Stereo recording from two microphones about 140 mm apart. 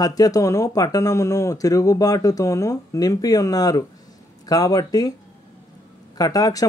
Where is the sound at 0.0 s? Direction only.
25° left (ahead or behind).